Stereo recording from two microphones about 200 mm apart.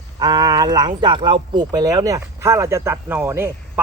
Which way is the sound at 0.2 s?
20° right (ahead or behind).